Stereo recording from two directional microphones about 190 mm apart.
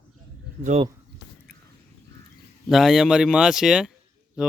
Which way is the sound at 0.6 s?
35° right (ahead or behind).